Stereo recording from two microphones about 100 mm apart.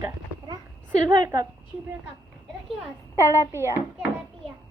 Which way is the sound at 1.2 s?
35° right (ahead or behind).